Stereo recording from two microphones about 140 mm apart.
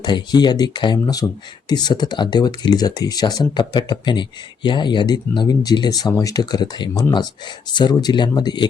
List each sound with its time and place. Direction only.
0.0 s speech: 30° left (ahead or behind)